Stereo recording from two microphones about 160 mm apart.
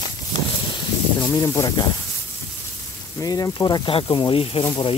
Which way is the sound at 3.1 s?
20° left (ahead or behind).